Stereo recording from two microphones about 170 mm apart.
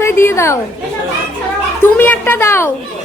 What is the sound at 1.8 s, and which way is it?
Speech, 10° left (ahead or behind).